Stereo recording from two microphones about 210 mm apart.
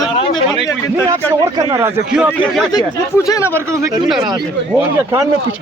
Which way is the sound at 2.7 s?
15° left (ahead or behind).